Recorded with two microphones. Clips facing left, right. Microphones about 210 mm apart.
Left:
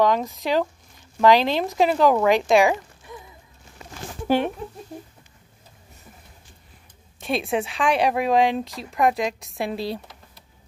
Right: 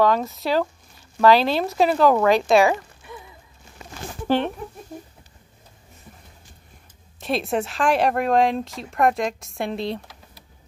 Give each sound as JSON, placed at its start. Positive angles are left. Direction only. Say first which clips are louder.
{"t": 0.0, "sound": "speech", "louder": "right 1 dB", "side_deg": 15}
{"t": 7.2, "sound": "speech", "louder": "right 1 dB", "side_deg": 0}